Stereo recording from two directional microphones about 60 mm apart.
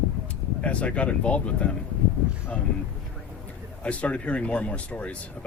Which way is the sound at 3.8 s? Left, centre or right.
Left.